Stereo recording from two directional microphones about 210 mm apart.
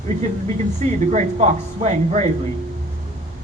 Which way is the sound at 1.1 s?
35° right (ahead or behind).